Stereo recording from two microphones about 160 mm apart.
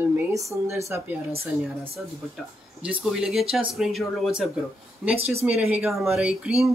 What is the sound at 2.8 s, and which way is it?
Speech, 5° right (ahead or behind).